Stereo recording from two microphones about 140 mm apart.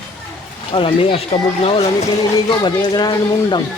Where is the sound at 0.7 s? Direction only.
40° left (ahead or behind).